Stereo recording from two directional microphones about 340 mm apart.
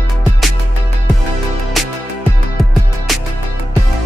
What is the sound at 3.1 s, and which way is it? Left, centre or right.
Music, centre.